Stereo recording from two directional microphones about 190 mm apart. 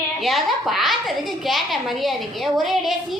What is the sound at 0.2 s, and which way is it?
A child's voice, centre (ahead or behind).